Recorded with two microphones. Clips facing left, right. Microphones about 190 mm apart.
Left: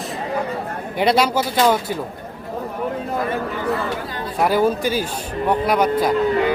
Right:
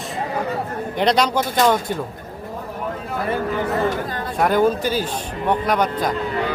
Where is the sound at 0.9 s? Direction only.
5° left (ahead or behind).